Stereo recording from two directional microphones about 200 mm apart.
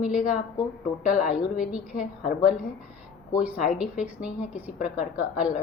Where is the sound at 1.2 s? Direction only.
5° right (ahead or behind).